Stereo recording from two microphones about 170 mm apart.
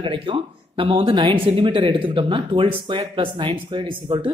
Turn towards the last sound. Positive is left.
turn(degrees=-35)  # may be behind; listen again after turning